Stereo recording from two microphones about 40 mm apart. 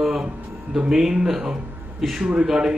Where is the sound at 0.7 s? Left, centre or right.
Centre.